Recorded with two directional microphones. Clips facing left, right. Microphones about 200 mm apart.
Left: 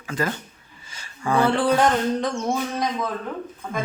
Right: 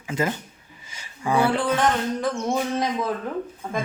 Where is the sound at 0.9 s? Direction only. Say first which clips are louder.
Even; 15° right (ahead or behind).